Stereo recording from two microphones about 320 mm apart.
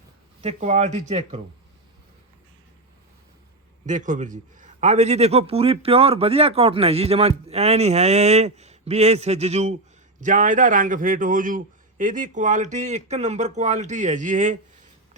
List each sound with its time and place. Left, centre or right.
0.4 s a man's voice: right
3.8 s a man's voice: right